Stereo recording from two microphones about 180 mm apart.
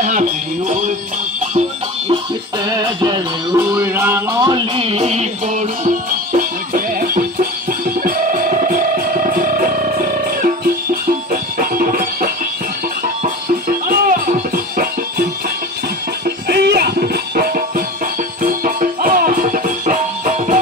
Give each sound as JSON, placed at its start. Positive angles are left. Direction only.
{"t": 0.0, "sound": "music", "side_deg": -45}
{"t": 2.6, "sound": "music", "side_deg": -20}
{"t": 16.3, "sound": "music", "side_deg": -65}